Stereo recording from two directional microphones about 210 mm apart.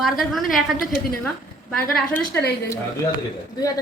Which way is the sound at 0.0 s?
Centre (ahead or behind).